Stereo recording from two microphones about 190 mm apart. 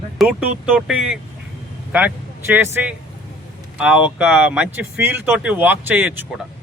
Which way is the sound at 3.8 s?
5° right (ahead or behind).